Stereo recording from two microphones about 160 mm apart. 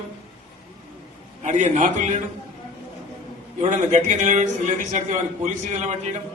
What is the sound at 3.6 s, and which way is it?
A man's voice, 50° right (ahead or behind).